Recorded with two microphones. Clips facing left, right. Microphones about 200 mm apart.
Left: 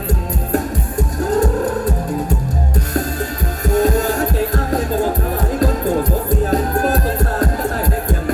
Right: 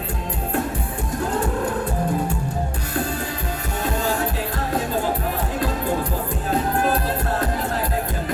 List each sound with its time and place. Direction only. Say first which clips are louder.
3.8 s music: left 9 dB; 45° left (ahead or behind)
6.5 s music: left 1 dB; 45° left (ahead or behind)